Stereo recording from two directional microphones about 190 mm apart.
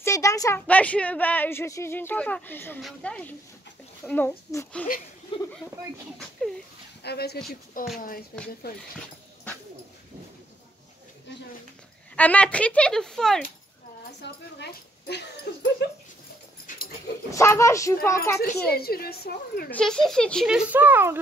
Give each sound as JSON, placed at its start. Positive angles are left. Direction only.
{"t": 0.0, "sound": "speech", "side_deg": 15}
{"t": 5.3, "sound": "speech", "side_deg": 30}
{"t": 7.0, "sound": "speech", "side_deg": 60}
{"t": 7.8, "sound": "a woman's voice", "side_deg": 45}
{"t": 12.2, "sound": "a child's voice", "side_deg": 10}
{"t": 14.2, "sound": "a woman's voice", "side_deg": 60}
{"t": 16.7, "sound": "dog", "side_deg": 45}
{"t": 17.3, "sound": "speech", "side_deg": 15}
{"t": 18.4, "sound": "a woman's voice", "side_deg": 55}
{"t": 19.7, "sound": "a child's voice", "side_deg": 5}